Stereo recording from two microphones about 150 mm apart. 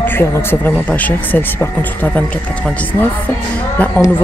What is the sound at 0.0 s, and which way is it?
Speech, 15° left (ahead or behind).